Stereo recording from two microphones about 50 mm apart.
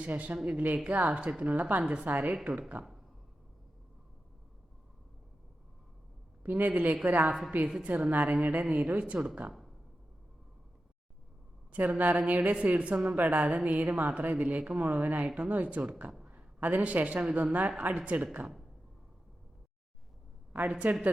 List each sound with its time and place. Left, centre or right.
0.0 s a woman's voice: right
1.5 s a woman's voice: right
2.4 s speech: right
6.4 s a woman's voice: right
9.1 s speech: centre
11.7 s a woman's voice: right
16.2 s a sound: right
17.3 s a woman's voice: right
20.7 s speech: right